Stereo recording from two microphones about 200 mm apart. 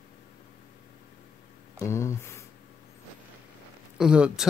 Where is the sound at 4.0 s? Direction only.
5° right (ahead or behind).